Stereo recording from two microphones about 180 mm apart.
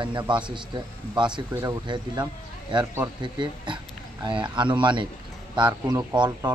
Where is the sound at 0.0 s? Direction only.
25° right (ahead or behind).